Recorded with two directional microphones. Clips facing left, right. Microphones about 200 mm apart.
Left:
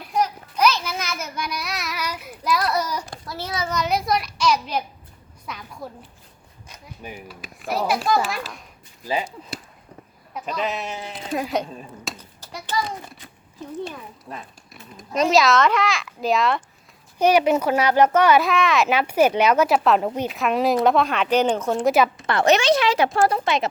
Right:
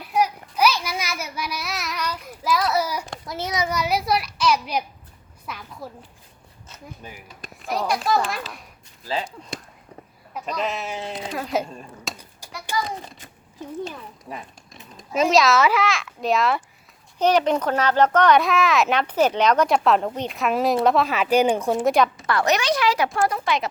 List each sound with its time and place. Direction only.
0.1 s child singing: 5° right (ahead or behind)
2.4 s a child's voice: centre (ahead or behind)
6.7 s speech: 15° left (ahead or behind)
7.7 s a child's voice: 5° left (ahead or behind)
10.3 s a child's voice: centre (ahead or behind)
12.7 s a child's voice: 10° right (ahead or behind)
14.3 s a child's voice: 10° right (ahead or behind)
17.2 s a child's voice: 10° left (ahead or behind)
22.3 s a woman's voice: 25° left (ahead or behind)